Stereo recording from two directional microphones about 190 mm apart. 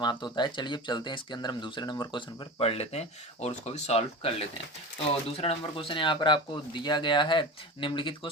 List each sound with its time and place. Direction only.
0.0 s speech: 25° left (ahead or behind)
5.4 s speech: 30° left (ahead or behind)